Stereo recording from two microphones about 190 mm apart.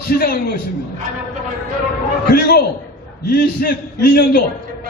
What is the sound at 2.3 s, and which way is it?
A man's voice, 55° left (ahead or behind).